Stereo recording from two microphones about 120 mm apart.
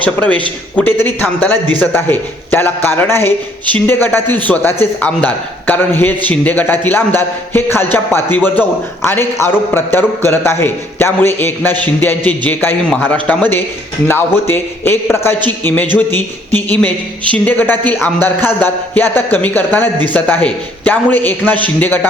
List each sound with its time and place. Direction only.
0.0 s a man's voice: 10° left (ahead or behind)